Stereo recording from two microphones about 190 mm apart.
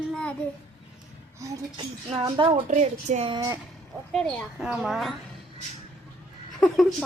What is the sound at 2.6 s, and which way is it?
Speech, 40° right (ahead or behind).